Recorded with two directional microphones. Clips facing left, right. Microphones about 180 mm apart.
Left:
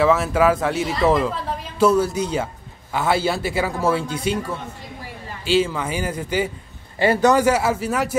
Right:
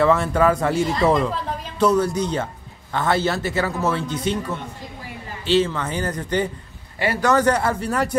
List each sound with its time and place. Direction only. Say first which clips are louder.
0.0 s a man's voice: even; 5° left (ahead or behind)
7.0 s speech: left 4 dB; 25° left (ahead or behind)
7.3 s speech: left 1 dB; 5° left (ahead or behind)